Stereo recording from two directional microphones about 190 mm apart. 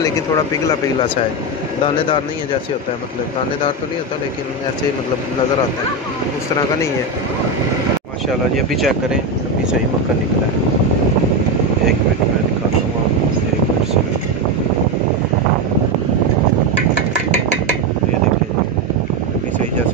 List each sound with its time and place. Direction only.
0.7 s speech: 25° left (ahead or behind)
8.3 s speech: centre (ahead or behind)